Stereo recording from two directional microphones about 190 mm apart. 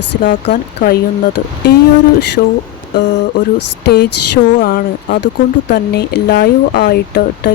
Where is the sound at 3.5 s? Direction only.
60° left (ahead or behind).